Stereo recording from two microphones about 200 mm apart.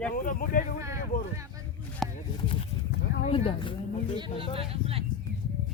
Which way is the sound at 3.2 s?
25° left (ahead or behind).